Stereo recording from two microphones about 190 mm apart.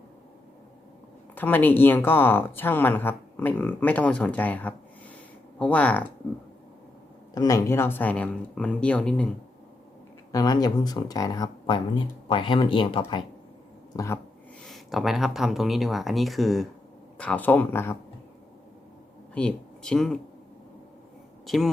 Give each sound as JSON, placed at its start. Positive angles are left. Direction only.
{"t": 1.4, "sound": "speech", "side_deg": 10}
{"t": 7.3, "sound": "speech", "side_deg": 15}
{"t": 10.3, "sound": "speech", "side_deg": 20}
{"t": 13.9, "sound": "speech", "side_deg": 15}
{"t": 14.7, "sound": "speech", "side_deg": 0}
{"t": 19.3, "sound": "speech", "side_deg": 5}
{"t": 21.4, "sound": "speech", "side_deg": 0}